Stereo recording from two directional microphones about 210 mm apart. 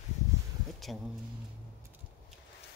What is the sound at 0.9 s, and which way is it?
Speech, centre (ahead or behind).